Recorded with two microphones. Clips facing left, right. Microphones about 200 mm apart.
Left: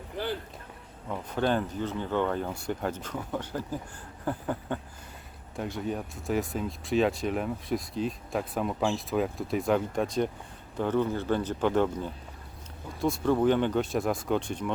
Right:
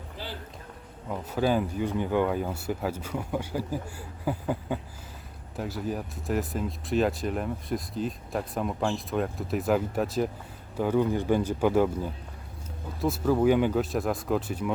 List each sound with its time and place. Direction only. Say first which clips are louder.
1.1 s speech: right 2 dB; 5° right (ahead or behind)